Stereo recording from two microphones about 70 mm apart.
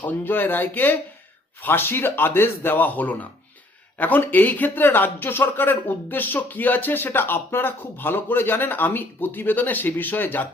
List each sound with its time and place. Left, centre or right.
0.0 s speech: left